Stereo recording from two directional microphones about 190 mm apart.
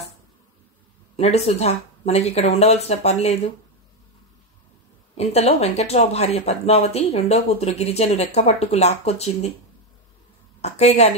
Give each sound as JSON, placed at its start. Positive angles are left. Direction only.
{"t": 1.1, "sound": "speech", "side_deg": 35}
{"t": 5.1, "sound": "speech", "side_deg": 35}
{"t": 10.6, "sound": "a woman's voice", "side_deg": 35}